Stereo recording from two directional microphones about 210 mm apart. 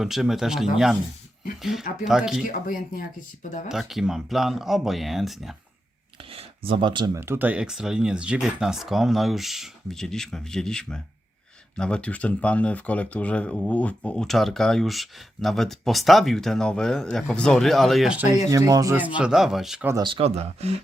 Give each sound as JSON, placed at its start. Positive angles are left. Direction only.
{"t": 0.0, "sound": "speech", "side_deg": 0}
{"t": 2.0, "sound": "speech", "side_deg": 0}
{"t": 2.5, "sound": "speech", "side_deg": 40}
{"t": 3.7, "sound": "speech", "side_deg": 0}
{"t": 6.3, "sound": "speech", "side_deg": -25}
{"t": 18.5, "sound": "speech", "side_deg": -15}
{"t": 19.9, "sound": "speech", "side_deg": -20}